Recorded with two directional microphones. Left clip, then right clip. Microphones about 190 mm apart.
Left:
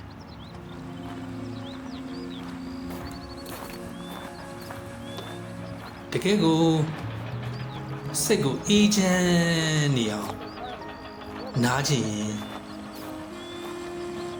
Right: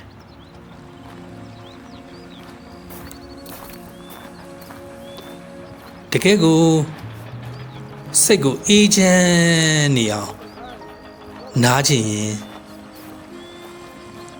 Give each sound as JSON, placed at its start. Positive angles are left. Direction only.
{"t": 6.1, "sound": "speech", "side_deg": -50}
{"t": 8.1, "sound": "speech", "side_deg": -45}
{"t": 11.5, "sound": "speech", "side_deg": -50}